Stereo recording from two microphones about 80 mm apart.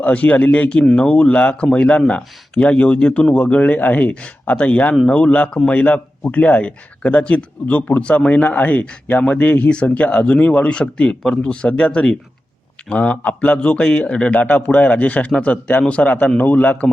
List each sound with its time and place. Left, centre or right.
0.0 s a man's voice: centre